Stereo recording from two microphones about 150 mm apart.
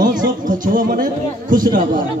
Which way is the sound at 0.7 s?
65° right (ahead or behind).